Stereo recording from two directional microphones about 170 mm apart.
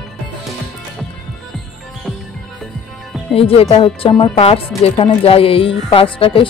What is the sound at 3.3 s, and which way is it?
A woman's voice, 35° left (ahead or behind).